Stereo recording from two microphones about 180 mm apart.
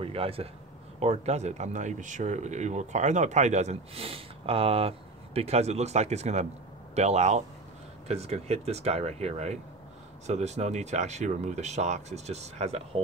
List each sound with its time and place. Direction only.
0.0 s speech: 30° right (ahead or behind)